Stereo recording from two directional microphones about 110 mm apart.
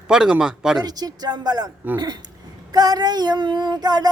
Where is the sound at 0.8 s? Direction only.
35° right (ahead or behind).